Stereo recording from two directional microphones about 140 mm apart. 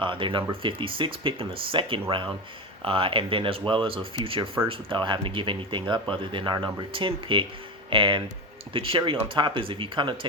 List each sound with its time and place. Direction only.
0.0 s speech: 35° right (ahead or behind)